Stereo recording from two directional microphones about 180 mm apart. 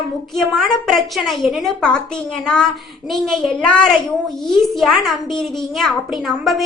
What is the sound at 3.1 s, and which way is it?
A child's voice, centre (ahead or behind).